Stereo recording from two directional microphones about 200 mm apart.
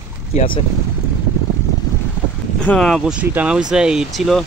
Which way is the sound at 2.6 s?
5° left (ahead or behind).